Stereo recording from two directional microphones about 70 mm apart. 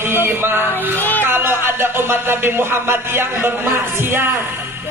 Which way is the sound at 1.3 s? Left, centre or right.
Right.